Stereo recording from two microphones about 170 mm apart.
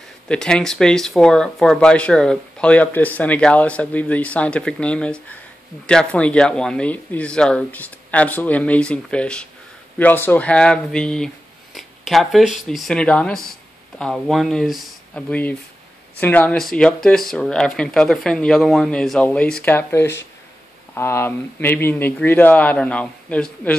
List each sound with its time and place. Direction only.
0.3 s speech: 5° left (ahead or behind)